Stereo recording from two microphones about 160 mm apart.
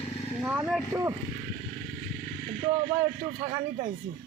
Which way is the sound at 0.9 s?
20° right (ahead or behind).